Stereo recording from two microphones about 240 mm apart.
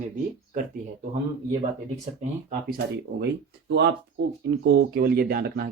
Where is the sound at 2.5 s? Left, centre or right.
Right.